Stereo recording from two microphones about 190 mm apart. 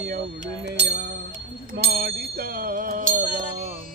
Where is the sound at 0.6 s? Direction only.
65° right (ahead or behind).